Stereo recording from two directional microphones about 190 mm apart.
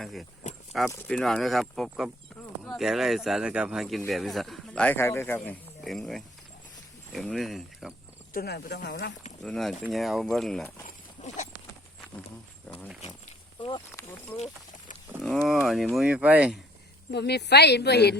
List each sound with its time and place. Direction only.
0.0 s speech: centre (ahead or behind)
8.3 s a woman's voice: 55° left (ahead or behind)
9.4 s speech: centre (ahead or behind)
10.8 s a sound: 40° left (ahead or behind)
13.6 s snake: 25° left (ahead or behind)
13.9 s a sound: 10° left (ahead or behind)
15.4 s speech: centre (ahead or behind)
17.1 s a woman's voice: 60° left (ahead or behind)